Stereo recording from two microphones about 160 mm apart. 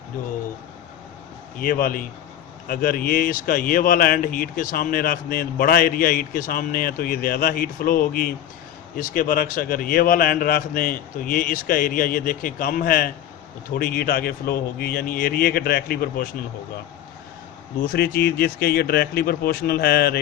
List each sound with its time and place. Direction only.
1.6 s speech: 65° left (ahead or behind)
17.8 s speech: 75° left (ahead or behind)